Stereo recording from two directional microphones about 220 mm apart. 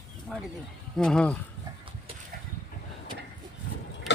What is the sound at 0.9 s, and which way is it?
Speech, 5° left (ahead or behind).